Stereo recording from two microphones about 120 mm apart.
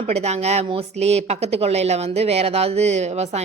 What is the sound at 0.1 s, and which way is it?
Speech, 65° right (ahead or behind).